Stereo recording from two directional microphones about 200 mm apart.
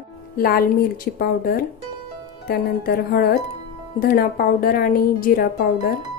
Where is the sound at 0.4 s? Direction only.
50° left (ahead or behind).